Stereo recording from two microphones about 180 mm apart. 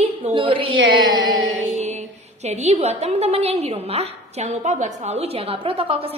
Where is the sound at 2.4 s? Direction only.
35° right (ahead or behind).